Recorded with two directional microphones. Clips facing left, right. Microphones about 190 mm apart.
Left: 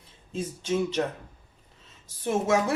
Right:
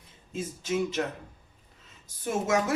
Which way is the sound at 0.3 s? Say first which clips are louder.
Left 2 dB; 30° left (ahead or behind).